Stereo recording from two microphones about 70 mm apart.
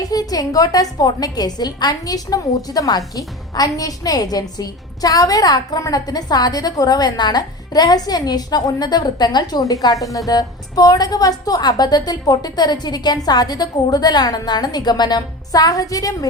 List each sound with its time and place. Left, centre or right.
0.0 s a woman's voice: left
9.8 s a woman's voice: left